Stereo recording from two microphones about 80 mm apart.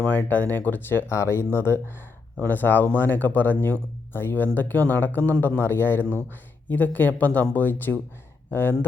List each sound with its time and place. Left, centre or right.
0.0 s speech: left